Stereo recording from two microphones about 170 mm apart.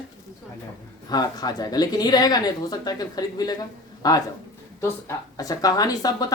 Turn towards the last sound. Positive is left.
turn(degrees=20)  # may be behind; listen again after turning